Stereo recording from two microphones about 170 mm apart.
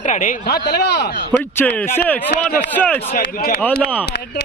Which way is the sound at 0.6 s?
80° left.